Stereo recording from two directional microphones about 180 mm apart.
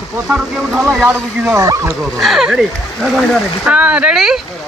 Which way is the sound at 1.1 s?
15° right (ahead or behind).